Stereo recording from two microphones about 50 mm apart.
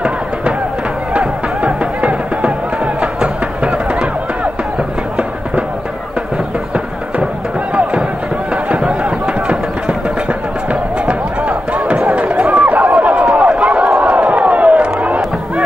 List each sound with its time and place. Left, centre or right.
1.1 s music: centre
8.8 s a sound: centre
10.7 s music: right
12.0 s run: right
14.0 s crowd: right